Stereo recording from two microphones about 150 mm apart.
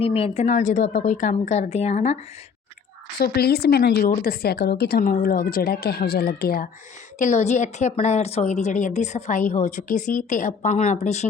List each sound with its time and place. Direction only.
0.0 s a woman's voice: 40° left (ahead or behind)
3.2 s a woman's voice: 90° left
4.1 s speech: 75° left (ahead or behind)
7.2 s a woman's voice: 50° left (ahead or behind)